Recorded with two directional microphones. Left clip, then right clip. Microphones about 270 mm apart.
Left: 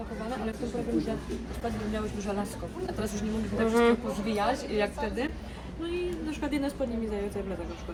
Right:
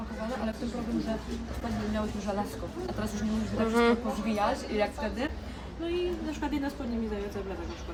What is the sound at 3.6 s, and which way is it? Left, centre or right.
Speech, centre.